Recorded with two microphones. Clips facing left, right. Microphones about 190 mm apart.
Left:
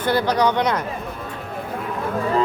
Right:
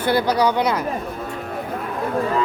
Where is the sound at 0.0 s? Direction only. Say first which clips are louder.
Right 1 dB; 10° right (ahead or behind).